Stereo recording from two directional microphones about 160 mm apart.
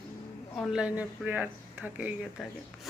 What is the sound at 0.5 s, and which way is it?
Speech, centre (ahead or behind).